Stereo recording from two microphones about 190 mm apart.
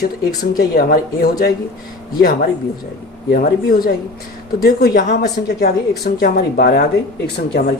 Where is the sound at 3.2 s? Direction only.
50° left (ahead or behind).